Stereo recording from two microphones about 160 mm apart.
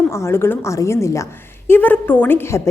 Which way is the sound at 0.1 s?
15° left (ahead or behind).